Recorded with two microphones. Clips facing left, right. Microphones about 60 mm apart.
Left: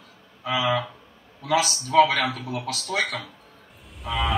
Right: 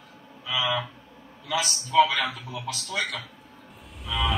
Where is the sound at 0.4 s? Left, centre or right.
Left.